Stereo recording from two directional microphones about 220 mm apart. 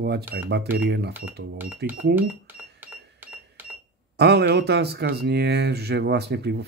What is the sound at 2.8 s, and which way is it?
Cash register, 10° right (ahead or behind).